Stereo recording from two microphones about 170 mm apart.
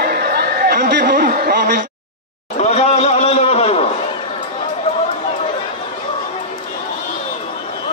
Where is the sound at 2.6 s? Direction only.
40° left (ahead or behind).